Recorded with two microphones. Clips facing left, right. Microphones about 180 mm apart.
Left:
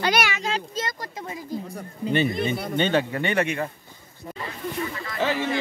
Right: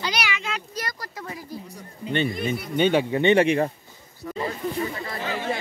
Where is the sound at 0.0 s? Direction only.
50° left (ahead or behind).